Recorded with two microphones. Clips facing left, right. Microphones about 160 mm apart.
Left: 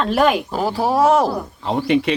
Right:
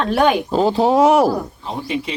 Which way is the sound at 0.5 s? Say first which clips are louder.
Right 4 dB; 20° right (ahead or behind).